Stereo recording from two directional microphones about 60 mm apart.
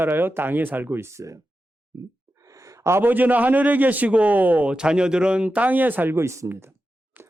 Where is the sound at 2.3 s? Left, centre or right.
Right.